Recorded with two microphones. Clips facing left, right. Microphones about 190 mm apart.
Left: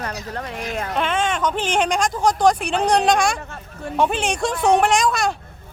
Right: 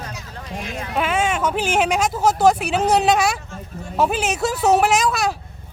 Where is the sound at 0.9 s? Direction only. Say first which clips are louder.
Right 2 dB; 5° right (ahead or behind).